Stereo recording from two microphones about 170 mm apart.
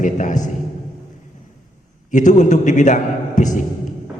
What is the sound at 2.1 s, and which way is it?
A man's voice, 45° left (ahead or behind).